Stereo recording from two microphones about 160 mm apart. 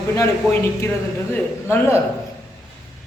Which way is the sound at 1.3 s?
15° left (ahead or behind).